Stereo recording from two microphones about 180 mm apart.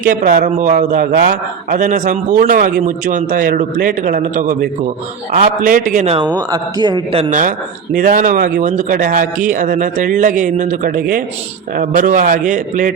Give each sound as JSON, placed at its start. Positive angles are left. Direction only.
{"t": 0.0, "sound": "a man's voice", "side_deg": -50}
{"t": 6.1, "sound": "speech", "side_deg": -20}
{"t": 7.3, "sound": "a man's voice", "side_deg": -45}